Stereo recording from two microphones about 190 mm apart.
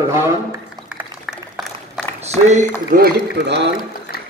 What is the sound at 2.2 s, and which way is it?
Speech, 35° right (ahead or behind).